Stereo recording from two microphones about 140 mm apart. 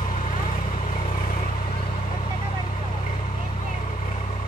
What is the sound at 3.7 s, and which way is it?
Vehicle, 55° left (ahead or behind).